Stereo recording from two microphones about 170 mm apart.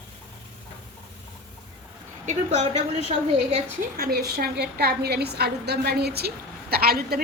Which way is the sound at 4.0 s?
65° right (ahead or behind).